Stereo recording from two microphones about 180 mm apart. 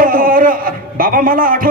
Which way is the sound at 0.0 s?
50° right (ahead or behind).